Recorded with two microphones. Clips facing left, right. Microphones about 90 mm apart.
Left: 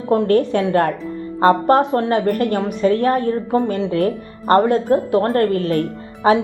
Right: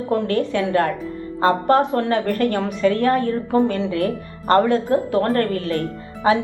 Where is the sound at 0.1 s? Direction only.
35° left (ahead or behind).